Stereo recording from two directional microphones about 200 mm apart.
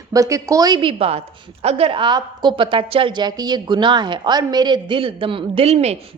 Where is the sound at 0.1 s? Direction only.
15° right (ahead or behind).